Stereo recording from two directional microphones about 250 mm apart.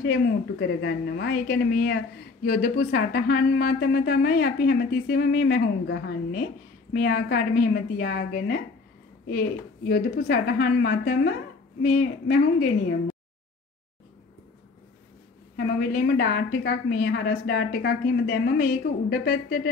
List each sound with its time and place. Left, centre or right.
0.6 s a woman's voice: left
9.8 s a woman's voice: left
15.5 s a woman's voice: left